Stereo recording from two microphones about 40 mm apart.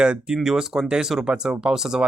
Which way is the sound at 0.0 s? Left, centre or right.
Right.